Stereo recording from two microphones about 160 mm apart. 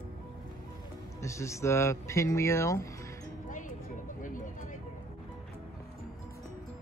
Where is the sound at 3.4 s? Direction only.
55° left (ahead or behind).